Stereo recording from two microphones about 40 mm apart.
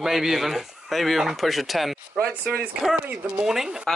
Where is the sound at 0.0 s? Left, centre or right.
Centre.